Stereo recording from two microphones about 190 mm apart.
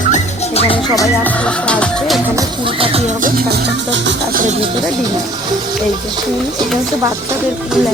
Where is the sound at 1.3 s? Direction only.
5° left (ahead or behind).